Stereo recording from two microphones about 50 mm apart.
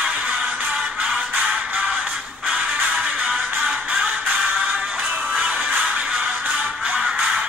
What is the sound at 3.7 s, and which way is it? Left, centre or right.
Music, right.